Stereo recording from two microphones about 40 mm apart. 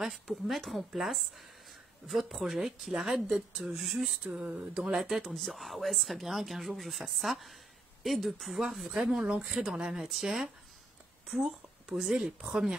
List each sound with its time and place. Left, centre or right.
0.5 s speech: centre
4.2 s speech: right
5.0 s speech: centre
9.0 s speech: centre